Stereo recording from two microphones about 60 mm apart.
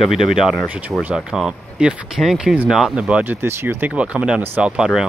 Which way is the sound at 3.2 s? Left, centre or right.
Right.